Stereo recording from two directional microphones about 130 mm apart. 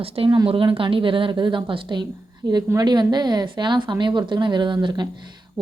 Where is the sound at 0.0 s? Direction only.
45° right (ahead or behind).